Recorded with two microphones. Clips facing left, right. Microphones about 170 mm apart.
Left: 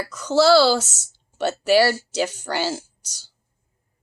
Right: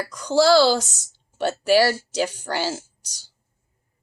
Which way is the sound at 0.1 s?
15° right (ahead or behind).